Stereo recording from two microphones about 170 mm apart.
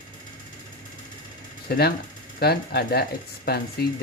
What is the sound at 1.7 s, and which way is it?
Speech, 70° left (ahead or behind).